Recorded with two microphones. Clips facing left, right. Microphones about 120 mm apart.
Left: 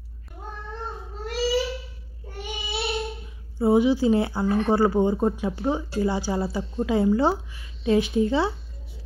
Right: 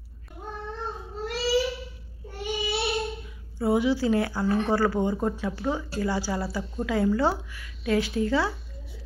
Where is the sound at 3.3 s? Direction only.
20° left (ahead or behind).